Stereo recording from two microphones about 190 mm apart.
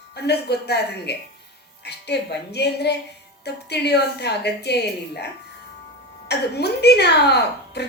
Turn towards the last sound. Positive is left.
turn(degrees=60)  # may be behind; listen again after turning